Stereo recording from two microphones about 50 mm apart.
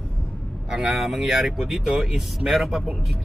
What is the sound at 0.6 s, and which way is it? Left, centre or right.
Speech, centre.